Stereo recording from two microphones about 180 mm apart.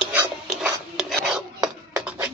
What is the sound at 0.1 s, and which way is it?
Dog, 10° right (ahead or behind).